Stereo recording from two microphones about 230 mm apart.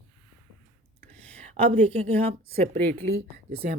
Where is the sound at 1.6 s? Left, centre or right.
Right.